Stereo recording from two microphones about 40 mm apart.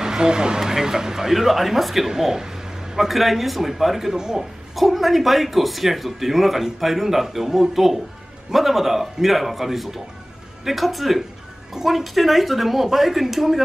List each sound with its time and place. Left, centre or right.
0.0 s speech: centre
4.7 s speech: centre